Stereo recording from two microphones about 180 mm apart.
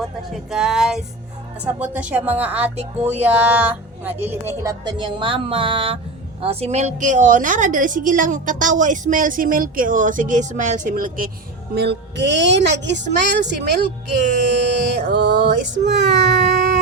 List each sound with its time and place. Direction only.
0.0 s speech: centre (ahead or behind)
4.9 s a woman's voice: 25° right (ahead or behind); by 11.3 s 50° right (ahead or behind)
11.7 s a woman's voice: 65° right (ahead or behind)
15.9 s child singing: 70° right (ahead or behind)